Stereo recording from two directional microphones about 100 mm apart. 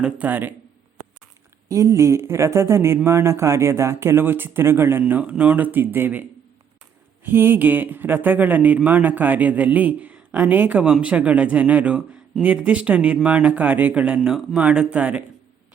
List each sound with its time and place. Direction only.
0.0 s speech: 15° right (ahead or behind)
1.7 s speech: 30° right (ahead or behind)
7.3 s speech: 20° right (ahead or behind)